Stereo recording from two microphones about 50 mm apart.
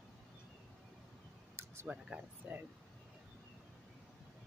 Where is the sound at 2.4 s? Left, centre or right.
Right.